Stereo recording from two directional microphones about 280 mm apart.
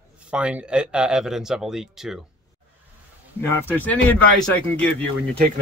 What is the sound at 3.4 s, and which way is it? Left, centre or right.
Speech, centre.